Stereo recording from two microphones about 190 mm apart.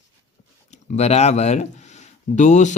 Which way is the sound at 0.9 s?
35° left (ahead or behind).